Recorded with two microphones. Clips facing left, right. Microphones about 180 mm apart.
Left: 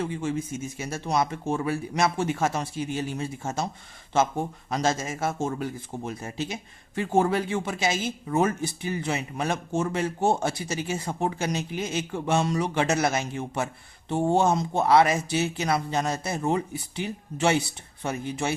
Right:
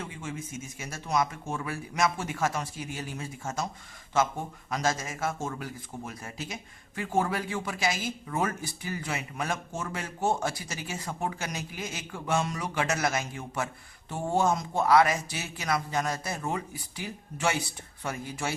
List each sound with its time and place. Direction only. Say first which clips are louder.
0.0 s speech: left 9 dB; 30° left (ahead or behind)